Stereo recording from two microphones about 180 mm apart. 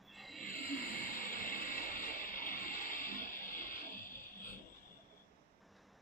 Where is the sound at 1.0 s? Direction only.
50° left (ahead or behind).